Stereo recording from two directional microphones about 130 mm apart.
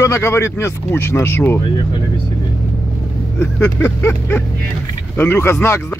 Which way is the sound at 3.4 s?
15° left (ahead or behind).